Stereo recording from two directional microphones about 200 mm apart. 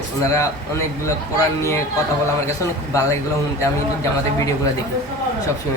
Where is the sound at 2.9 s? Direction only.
15° left (ahead or behind).